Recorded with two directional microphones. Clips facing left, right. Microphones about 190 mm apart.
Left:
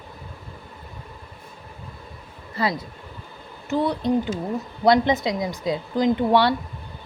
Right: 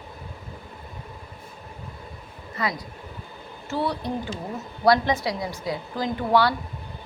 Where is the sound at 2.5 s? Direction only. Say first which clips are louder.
Left 4 dB; 30° left (ahead or behind).